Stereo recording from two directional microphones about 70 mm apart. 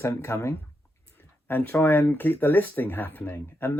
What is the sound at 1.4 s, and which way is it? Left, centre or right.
Speech, left.